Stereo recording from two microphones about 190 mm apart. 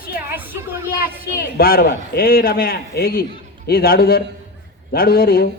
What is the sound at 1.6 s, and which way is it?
A man's voice, 50° left (ahead or behind).